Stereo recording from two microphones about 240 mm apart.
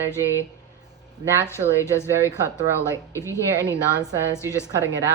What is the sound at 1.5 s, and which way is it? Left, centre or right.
A woman's voice, centre.